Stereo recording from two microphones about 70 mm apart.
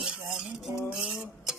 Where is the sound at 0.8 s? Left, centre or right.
Centre.